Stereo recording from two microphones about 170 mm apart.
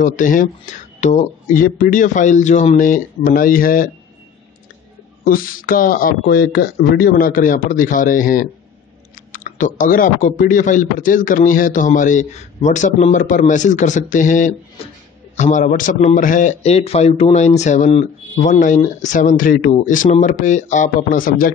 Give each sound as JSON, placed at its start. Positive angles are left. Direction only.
{"t": 0.0, "sound": "speech", "side_deg": 50}
{"t": 5.2, "sound": "speech", "side_deg": 55}